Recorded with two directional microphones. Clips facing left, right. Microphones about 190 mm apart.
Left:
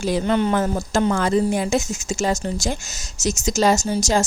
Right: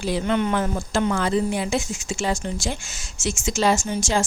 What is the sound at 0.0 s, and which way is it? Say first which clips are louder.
A woman's voice: left 3 dB; 40° left (ahead or behind).